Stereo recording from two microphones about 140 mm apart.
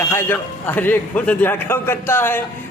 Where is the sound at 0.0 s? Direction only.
15° left (ahead or behind).